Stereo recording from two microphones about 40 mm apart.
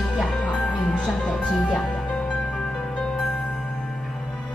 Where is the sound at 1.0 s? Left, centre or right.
Left.